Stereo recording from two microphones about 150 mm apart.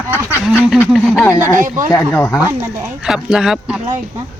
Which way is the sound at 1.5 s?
60° right (ahead or behind).